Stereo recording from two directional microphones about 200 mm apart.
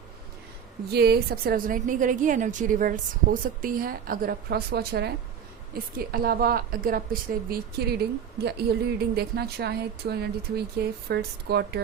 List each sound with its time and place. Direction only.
0.9 s a woman's voice: 50° right (ahead or behind)